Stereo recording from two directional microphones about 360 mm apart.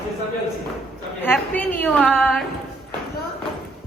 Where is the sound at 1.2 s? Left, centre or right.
Centre.